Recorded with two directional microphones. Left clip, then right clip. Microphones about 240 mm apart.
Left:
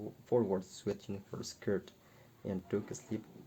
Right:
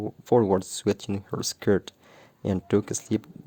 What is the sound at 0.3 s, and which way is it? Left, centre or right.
Speech, right.